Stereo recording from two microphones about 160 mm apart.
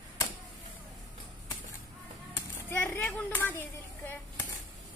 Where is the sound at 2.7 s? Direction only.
15° left (ahead or behind).